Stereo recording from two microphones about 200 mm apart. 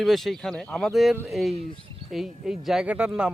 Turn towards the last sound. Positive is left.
turn(degrees=-5)  # may be behind; listen again after turning